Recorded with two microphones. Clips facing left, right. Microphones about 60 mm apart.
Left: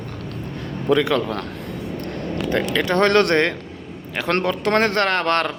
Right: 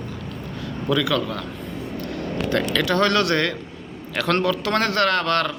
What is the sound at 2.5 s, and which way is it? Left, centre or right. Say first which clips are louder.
Speech: left 1 dB; left.